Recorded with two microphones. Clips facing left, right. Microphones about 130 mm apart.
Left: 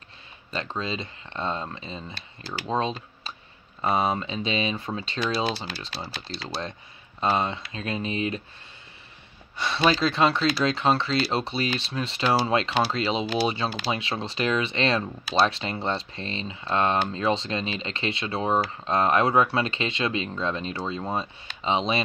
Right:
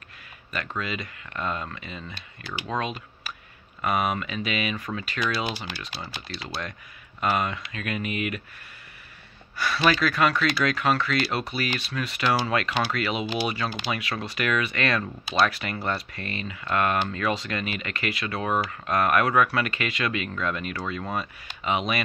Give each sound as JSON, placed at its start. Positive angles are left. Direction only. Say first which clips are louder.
{"t": 0.5, "sound": "speech", "louder": "left 1 dB", "side_deg": 30}
{"t": 7.2, "sound": "speech", "louder": "left 1 dB", "side_deg": 30}
{"t": 9.8, "sound": "speech", "louder": "left 1 dB", "side_deg": 25}